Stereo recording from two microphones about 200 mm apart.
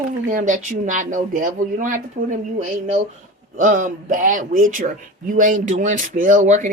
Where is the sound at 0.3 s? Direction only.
40° right (ahead or behind).